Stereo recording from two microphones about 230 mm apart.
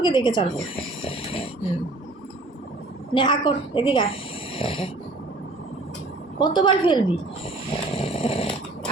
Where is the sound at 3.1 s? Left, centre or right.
Centre.